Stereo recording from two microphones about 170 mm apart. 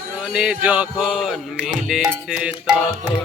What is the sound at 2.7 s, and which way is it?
Music, 20° right (ahead or behind).